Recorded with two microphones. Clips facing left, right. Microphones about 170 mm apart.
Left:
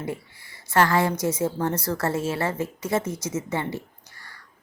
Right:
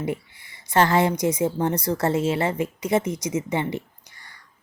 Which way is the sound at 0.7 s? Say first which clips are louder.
Right 2 dB; 20° right (ahead or behind).